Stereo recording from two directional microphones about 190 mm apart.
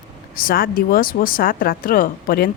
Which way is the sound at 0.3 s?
50° left (ahead or behind).